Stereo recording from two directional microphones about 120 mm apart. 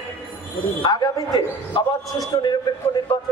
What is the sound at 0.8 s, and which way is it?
A man's voice, 35° left (ahead or behind).